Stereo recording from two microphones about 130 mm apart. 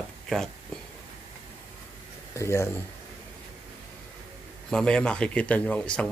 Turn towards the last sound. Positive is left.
turn(degrees=10)  # may be behind; listen again after turning